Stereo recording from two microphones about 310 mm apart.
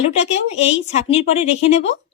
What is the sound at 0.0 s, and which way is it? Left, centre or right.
Speech, left.